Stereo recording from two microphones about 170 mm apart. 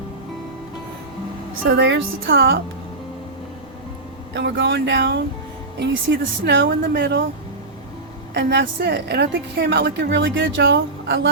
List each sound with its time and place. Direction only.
1.6 s a woman's voice: 90° right
4.4 s a woman's voice: 90° right
8.3 s a woman's voice: 90° right